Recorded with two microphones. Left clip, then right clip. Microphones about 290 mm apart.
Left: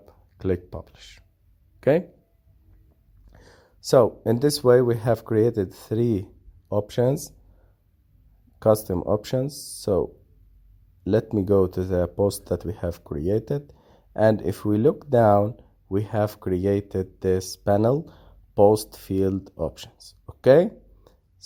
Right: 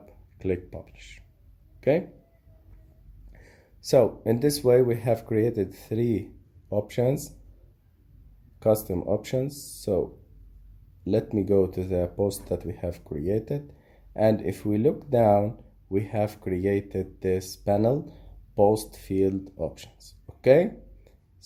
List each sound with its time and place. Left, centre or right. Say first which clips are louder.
0.0 s speech: left 3 dB; left
3.3 s speech: left 3 dB; left
8.5 s a sound: left 3 dB; left
8.9 s speech: left 3 dB; left
11.0 s speech: left 3 dB; left